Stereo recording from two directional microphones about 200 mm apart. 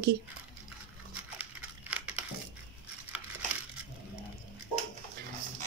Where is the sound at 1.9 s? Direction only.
5° right (ahead or behind).